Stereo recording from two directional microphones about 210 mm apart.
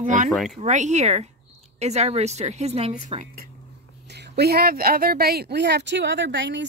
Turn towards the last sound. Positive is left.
turn(degrees=-60)  # may be behind; listen again after turning